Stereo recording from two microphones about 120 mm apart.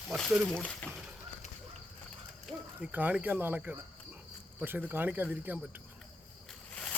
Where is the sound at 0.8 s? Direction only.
10° left (ahead or behind).